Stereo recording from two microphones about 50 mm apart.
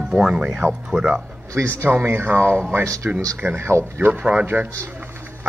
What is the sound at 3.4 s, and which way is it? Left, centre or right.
Speech, centre.